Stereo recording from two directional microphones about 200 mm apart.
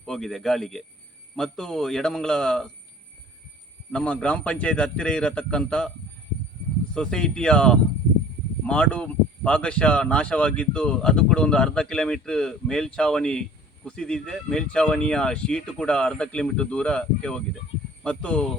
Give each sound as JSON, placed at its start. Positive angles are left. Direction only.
{"t": 0.0, "sound": "speech", "side_deg": 0}
{"t": 3.9, "sound": "speech", "side_deg": 5}
{"t": 6.9, "sound": "speech", "side_deg": 5}